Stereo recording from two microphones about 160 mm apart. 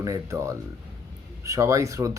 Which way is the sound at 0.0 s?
20° right (ahead or behind).